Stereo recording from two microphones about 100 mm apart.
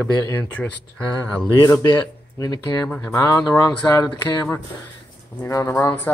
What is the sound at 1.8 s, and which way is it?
Speech, 45° left (ahead or behind).